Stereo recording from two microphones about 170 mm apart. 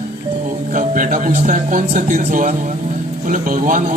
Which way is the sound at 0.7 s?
50° right (ahead or behind).